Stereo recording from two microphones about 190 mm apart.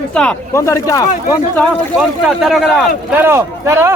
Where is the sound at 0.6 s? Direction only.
15° left (ahead or behind).